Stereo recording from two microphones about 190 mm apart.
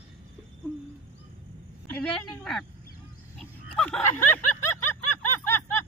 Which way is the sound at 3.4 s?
5° left (ahead or behind).